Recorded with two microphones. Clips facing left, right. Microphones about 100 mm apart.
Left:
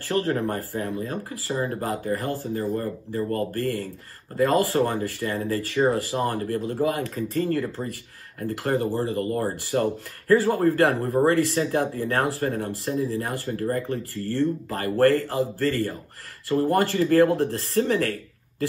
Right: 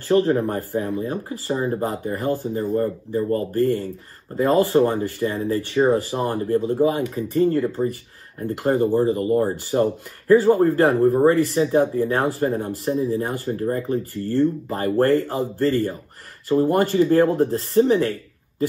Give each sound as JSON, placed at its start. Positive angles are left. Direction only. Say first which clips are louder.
{"t": 0.1, "sound": "speech", "louder": "right 6 dB", "side_deg": -25}